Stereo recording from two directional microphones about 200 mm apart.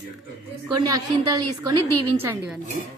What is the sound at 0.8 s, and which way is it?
A woman's voice, 20° right (ahead or behind).